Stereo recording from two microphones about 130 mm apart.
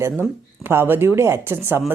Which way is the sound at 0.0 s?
20° right (ahead or behind).